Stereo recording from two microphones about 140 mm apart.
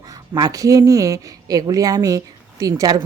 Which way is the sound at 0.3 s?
25° right (ahead or behind).